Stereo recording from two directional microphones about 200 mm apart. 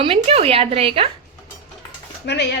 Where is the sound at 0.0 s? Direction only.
30° right (ahead or behind).